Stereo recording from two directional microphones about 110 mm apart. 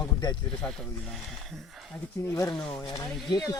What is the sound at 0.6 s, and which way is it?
Speech, 15° left (ahead or behind).